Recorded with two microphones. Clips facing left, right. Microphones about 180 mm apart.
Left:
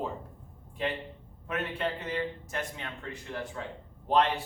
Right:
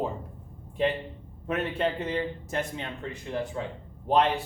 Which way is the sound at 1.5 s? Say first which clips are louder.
Right 5 dB; 30° right (ahead or behind).